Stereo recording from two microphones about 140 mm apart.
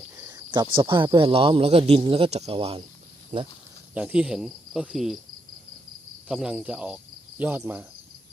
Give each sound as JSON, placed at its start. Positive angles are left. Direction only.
{"t": 0.2, "sound": "cricket", "side_deg": -30}
{"t": 0.8, "sound": "speech", "side_deg": -35}
{"t": 3.3, "sound": "speech", "side_deg": -60}
{"t": 3.9, "sound": "cricket", "side_deg": -10}
{"t": 6.2, "sound": "cricket", "side_deg": -10}